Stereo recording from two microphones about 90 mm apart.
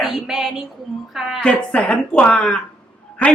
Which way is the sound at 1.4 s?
15° left (ahead or behind).